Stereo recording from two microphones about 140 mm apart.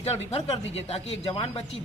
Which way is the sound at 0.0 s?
45° left (ahead or behind).